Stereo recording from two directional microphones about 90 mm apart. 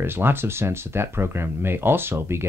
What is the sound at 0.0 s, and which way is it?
Speech, 25° right (ahead or behind).